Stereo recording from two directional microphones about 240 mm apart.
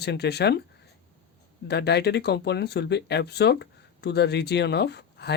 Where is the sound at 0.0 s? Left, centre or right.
Left.